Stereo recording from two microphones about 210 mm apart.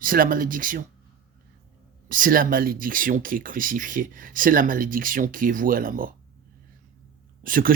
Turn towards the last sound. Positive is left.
turn(degrees=-40)  # may be behind; listen again after turning